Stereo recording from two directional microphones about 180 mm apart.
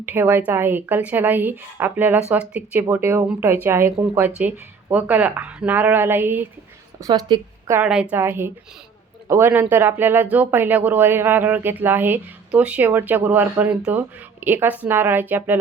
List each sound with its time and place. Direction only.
0.0 s speech: 10° right (ahead or behind)
7.0 s speech: 25° right (ahead or behind)
7.7 s speech: 5° right (ahead or behind)